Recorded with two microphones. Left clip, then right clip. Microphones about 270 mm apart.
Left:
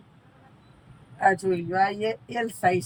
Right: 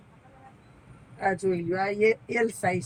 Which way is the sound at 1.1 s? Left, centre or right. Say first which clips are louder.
Left 4 dB; left.